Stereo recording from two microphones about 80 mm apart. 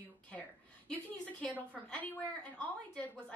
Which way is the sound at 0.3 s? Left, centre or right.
Centre.